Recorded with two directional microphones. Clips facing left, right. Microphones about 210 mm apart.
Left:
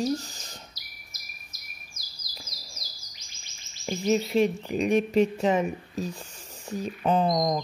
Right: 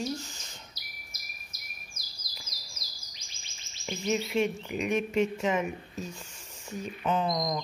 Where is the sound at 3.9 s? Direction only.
40° left (ahead or behind).